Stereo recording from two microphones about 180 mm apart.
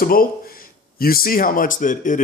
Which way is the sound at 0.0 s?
55° left (ahead or behind).